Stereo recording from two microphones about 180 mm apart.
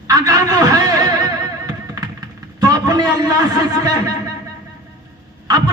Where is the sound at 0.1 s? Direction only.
20° right (ahead or behind).